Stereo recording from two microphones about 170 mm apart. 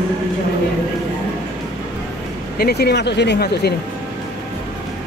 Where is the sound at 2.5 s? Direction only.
70° left (ahead or behind).